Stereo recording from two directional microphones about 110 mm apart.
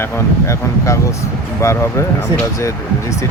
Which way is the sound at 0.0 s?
25° left (ahead or behind).